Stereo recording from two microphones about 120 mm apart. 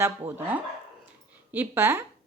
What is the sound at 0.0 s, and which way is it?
Speech, 15° right (ahead or behind).